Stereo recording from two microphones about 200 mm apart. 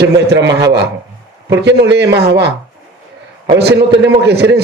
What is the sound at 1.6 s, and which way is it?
Speech, 60° right (ahead or behind).